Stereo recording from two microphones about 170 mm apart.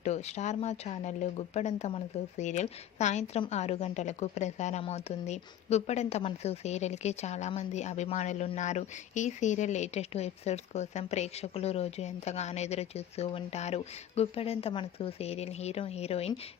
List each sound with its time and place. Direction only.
0.0 s a woman's voice: 40° left (ahead or behind)